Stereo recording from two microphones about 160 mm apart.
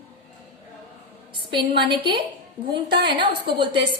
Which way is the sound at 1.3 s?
30° right (ahead or behind).